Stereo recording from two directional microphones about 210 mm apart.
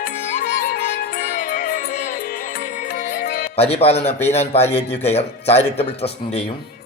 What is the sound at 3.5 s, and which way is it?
A man's voice, 30° left (ahead or behind).